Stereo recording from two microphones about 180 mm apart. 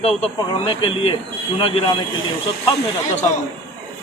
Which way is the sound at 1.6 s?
30° left (ahead or behind).